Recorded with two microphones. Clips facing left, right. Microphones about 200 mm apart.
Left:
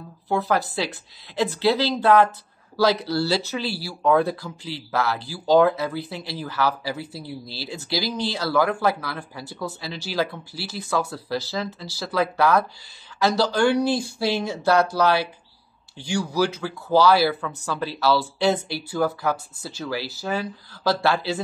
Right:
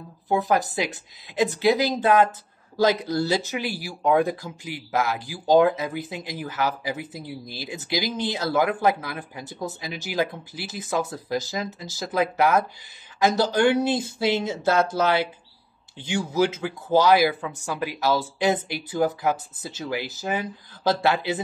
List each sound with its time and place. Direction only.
0.3 s speech: 15° right (ahead or behind)